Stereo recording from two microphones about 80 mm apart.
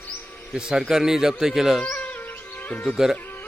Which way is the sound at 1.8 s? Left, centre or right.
Centre.